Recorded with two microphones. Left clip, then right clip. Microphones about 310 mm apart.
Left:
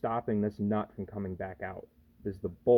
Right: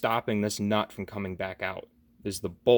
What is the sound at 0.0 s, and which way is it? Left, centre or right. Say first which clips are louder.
Speech: right 4 dB; right.